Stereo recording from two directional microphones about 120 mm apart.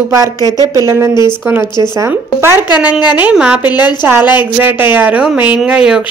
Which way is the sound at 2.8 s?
10° right (ahead or behind).